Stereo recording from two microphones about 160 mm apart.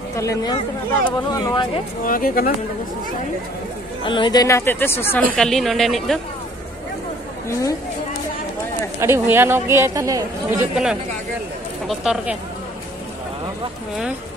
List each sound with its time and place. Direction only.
0.1 s speech: 20° left (ahead or behind)
2.0 s speech: 60° left (ahead or behind)
4.0 s speech: 30° left (ahead or behind); by 5.2 s 15° left (ahead or behind)
5.3 s speech: 5° left (ahead or behind)
7.4 s speech: 20° left (ahead or behind)
9.0 s a woman's voice: 15° right (ahead or behind)
11.9 s speech: centre (ahead or behind)